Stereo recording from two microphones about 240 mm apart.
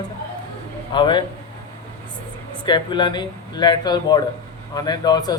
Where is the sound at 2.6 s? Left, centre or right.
Centre.